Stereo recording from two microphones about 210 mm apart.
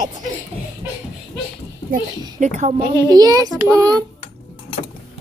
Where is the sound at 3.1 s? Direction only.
15° right (ahead or behind).